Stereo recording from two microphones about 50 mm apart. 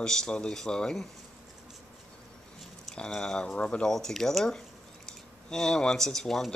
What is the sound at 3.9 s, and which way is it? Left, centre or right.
Speech, centre.